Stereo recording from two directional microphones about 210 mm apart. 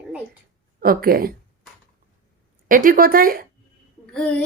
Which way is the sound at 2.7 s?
40° right (ahead or behind).